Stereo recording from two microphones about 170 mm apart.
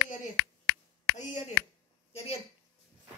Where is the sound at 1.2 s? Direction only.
45° left (ahead or behind).